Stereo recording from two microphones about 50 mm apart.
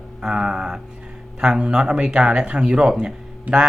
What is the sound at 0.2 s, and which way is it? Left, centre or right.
Speech, centre.